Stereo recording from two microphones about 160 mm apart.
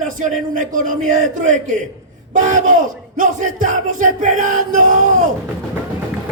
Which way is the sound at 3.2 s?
55° right (ahead or behind).